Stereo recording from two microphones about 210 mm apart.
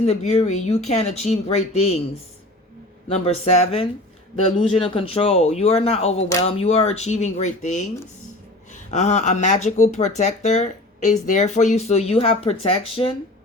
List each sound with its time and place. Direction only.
0.0 s speech: 30° left (ahead or behind)
3.1 s speech: 30° left (ahead or behind)